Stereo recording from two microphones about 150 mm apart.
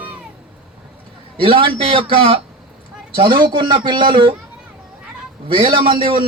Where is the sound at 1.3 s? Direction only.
35° right (ahead or behind).